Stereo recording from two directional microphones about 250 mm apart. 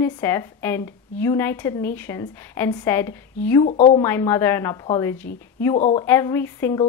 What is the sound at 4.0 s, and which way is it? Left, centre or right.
A woman's voice, centre.